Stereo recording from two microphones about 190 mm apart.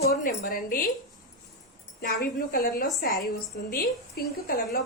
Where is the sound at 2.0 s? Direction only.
55° left (ahead or behind).